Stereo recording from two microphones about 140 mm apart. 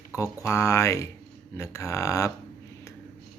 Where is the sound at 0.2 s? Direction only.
20° left (ahead or behind).